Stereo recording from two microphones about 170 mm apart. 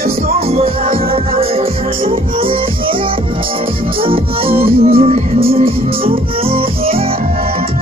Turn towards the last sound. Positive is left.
turn(degrees=-35)  # may be behind; listen again after turning